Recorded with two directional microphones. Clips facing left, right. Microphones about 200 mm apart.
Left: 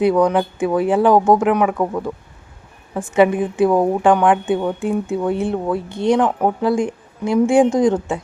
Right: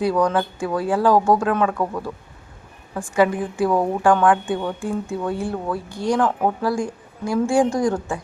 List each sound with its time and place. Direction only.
0.0 s a woman's voice: 20° left (ahead or behind)